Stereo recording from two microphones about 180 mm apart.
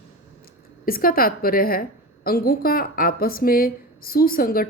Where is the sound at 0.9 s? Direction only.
55° left (ahead or behind).